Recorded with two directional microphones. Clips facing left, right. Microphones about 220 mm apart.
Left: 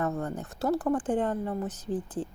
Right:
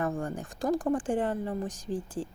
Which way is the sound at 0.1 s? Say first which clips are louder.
Left 1 dB; 30° right (ahead or behind).